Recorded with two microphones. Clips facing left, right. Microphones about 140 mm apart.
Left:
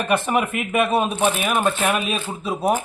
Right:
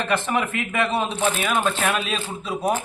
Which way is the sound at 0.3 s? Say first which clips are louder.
Left 3 dB; 20° left (ahead or behind).